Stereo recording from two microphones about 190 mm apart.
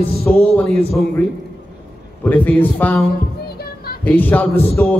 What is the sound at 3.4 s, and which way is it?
Music, 55° left (ahead or behind).